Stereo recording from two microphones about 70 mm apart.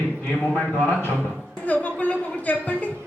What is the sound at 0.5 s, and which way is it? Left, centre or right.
A woman's voice, centre.